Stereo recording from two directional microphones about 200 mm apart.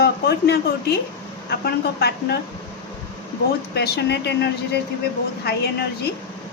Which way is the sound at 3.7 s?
55° left (ahead or behind).